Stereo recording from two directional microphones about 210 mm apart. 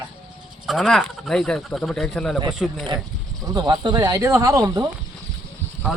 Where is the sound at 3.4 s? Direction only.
15° right (ahead or behind).